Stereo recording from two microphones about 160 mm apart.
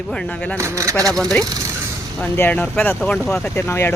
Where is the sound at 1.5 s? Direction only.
20° right (ahead or behind).